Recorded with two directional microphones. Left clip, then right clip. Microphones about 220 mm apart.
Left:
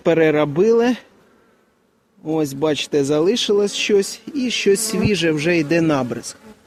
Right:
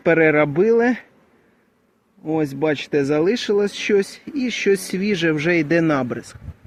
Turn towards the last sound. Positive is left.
turn(degrees=10)  # may be behind; listen again after turning